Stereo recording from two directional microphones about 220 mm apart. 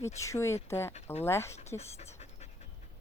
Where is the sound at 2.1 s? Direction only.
30° left (ahead or behind).